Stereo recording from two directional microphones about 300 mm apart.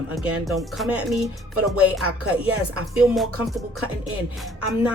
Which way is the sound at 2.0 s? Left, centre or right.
Right.